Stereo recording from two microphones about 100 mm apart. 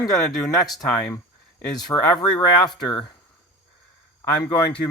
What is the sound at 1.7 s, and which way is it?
Speech, 40° left (ahead or behind).